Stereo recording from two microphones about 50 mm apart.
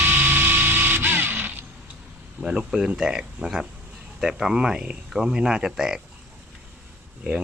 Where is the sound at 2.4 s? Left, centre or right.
Centre.